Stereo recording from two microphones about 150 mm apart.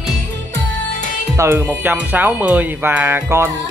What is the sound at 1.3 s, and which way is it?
Speech, 15° right (ahead or behind).